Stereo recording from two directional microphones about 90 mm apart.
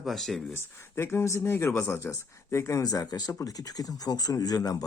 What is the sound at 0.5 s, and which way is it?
Speech, 25° left (ahead or behind).